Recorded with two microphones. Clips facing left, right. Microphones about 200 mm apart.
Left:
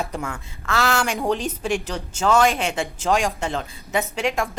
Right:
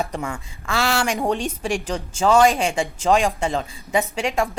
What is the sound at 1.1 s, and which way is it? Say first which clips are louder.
Speech: right 1 dB; 30° right (ahead or behind).